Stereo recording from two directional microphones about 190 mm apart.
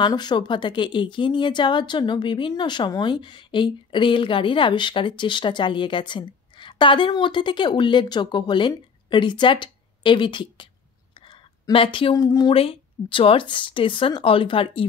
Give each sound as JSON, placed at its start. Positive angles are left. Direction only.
{"t": 0.0, "sound": "speech", "side_deg": 20}